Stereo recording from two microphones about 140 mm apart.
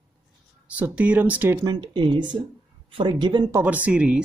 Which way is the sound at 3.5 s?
15° right (ahead or behind).